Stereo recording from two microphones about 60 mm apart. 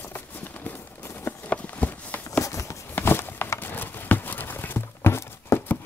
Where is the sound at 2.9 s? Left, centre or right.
Left.